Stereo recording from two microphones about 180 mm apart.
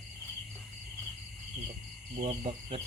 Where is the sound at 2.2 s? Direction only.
35° right (ahead or behind).